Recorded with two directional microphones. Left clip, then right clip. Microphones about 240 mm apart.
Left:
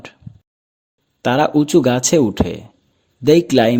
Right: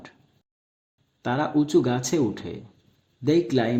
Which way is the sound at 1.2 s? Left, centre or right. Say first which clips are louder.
Left 9 dB; left.